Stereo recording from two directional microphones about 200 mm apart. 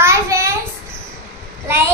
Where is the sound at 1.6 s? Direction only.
10° right (ahead or behind).